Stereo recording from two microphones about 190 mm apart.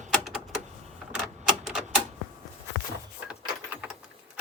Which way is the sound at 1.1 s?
Centre (ahead or behind).